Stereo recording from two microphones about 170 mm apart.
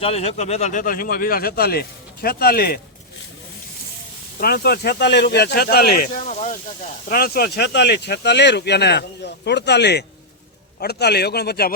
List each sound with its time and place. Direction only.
0.0 s speech: 35° left (ahead or behind); by 2.8 s 60° left (ahead or behind)
4.4 s speech: 65° left (ahead or behind); by 6.6 s 50° left (ahead or behind)
7.1 s speech: 60° left (ahead or behind)